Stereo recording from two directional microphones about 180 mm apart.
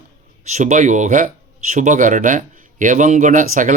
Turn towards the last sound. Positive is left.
turn(degrees=-45)  # may be behind; listen again after turning